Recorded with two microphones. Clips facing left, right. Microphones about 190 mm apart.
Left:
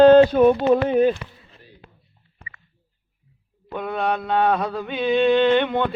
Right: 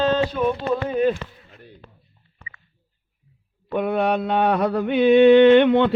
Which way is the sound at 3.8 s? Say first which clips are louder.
Right 4 dB; 60° right (ahead or behind).